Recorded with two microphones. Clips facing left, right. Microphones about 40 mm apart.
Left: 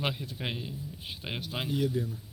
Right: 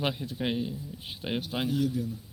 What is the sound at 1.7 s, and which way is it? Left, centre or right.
Speech, left.